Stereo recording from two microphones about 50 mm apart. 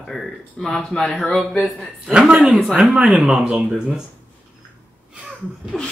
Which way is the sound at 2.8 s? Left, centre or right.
Right.